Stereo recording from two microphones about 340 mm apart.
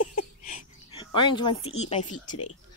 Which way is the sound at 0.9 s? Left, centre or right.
Centre.